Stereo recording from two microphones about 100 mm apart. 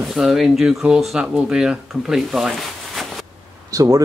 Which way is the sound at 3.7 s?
35° right (ahead or behind).